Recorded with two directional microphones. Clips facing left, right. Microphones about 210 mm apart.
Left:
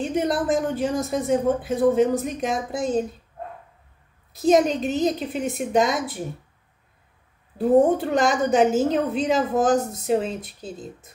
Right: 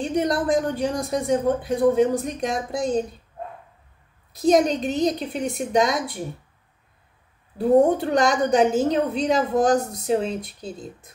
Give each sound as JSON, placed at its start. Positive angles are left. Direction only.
{"t": 0.0, "sound": "a woman's voice", "side_deg": 0}
{"t": 4.3, "sound": "a woman's voice", "side_deg": 0}
{"t": 7.5, "sound": "a woman's voice", "side_deg": 0}